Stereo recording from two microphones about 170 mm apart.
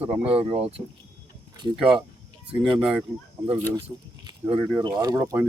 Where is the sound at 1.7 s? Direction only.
5° right (ahead or behind).